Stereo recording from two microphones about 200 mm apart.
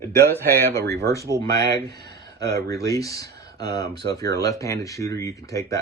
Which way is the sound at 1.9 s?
55° right (ahead or behind).